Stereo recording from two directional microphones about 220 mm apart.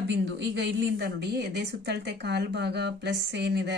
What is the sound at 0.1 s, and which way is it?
Speech, 55° right (ahead or behind).